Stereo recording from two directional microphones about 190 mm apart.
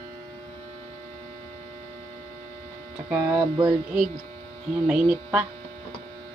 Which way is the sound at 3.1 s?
15° right (ahead or behind).